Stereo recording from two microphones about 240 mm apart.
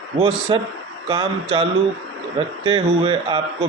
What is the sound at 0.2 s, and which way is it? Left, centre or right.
A man's voice, right.